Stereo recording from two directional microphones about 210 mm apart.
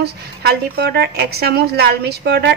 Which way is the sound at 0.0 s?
50° right (ahead or behind).